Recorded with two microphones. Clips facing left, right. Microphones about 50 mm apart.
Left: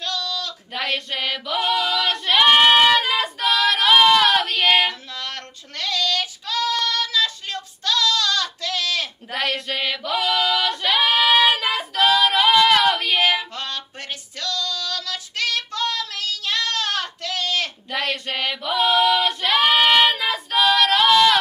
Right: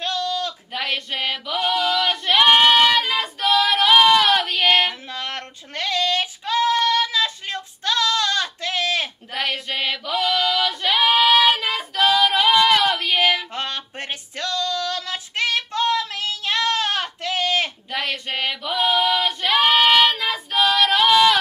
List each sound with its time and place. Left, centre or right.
0.0 s a sound: right
0.7 s female singing: centre
5.1 s child singing: right
9.3 s female singing: centre
14.4 s child singing: right
17.9 s female singing: centre